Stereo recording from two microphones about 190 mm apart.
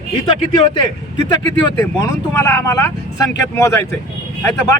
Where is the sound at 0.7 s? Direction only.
25° left (ahead or behind).